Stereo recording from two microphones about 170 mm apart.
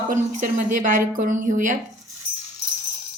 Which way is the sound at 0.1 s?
50° right (ahead or behind).